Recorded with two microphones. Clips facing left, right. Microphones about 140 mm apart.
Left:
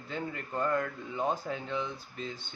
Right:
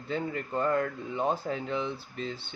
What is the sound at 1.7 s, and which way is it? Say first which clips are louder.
Speech: right 3 dB; 30° right (ahead or behind).